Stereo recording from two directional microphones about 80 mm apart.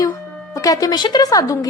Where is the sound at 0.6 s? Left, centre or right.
Left.